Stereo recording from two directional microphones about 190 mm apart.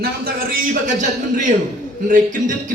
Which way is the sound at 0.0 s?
55° right (ahead or behind).